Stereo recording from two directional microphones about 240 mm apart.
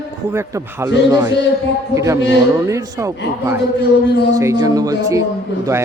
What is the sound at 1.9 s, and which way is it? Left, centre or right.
A man's voice, centre.